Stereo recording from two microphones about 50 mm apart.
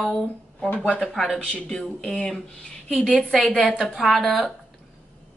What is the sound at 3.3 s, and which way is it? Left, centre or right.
Speech, centre.